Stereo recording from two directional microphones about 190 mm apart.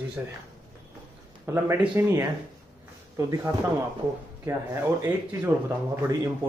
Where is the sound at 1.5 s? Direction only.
15° right (ahead or behind).